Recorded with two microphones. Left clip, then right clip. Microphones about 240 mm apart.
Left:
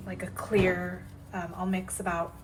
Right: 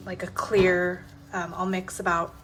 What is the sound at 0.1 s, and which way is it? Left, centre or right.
A woman's voice, centre.